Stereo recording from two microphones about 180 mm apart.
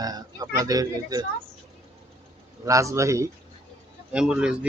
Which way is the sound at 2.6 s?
15° right (ahead or behind).